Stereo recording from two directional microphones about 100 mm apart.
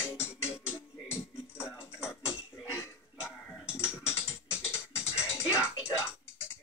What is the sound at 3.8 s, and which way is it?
Music, 25° left (ahead or behind).